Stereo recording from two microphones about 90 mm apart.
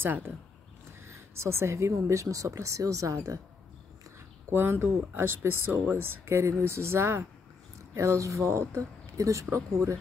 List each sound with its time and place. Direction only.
0.0 s speech: 25° right (ahead or behind)
4.5 s speech: 25° right (ahead or behind)